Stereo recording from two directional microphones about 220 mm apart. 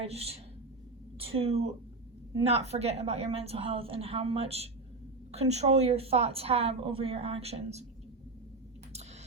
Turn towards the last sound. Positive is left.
turn(degrees=-30)  # may be behind; listen again after turning